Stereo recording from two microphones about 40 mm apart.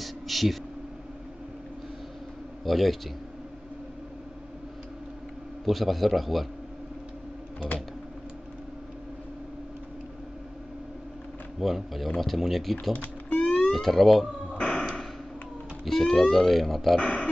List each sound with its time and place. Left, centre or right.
0.0 s a sound: centre
2.6 s speech: centre
5.7 s speech: centre
11.6 s speech: centre
12.9 s typing: left
13.7 s speech: centre
14.6 s a sound: left
15.8 s speech: centre
17.0 s speech: left